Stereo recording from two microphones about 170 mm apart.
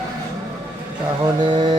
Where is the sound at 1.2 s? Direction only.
25° right (ahead or behind).